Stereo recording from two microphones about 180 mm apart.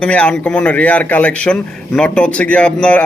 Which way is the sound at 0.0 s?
5° left (ahead or behind).